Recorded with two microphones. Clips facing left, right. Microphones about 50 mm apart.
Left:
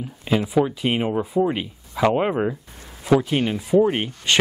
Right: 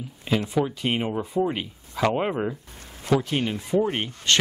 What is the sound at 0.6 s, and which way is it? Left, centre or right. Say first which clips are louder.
Speech: left 4 dB; centre.